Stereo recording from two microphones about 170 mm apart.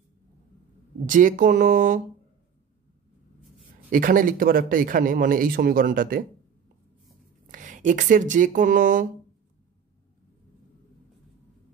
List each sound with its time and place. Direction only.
1.0 s a man's voice: 50° right (ahead or behind)
3.9 s a man's voice: 55° right (ahead or behind)
7.5 s speech: 50° right (ahead or behind)